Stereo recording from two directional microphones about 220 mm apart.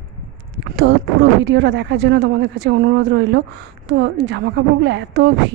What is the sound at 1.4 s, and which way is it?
A woman's voice, 55° right (ahead or behind).